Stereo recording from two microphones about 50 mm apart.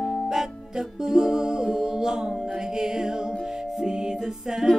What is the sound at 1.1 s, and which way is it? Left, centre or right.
Music, centre.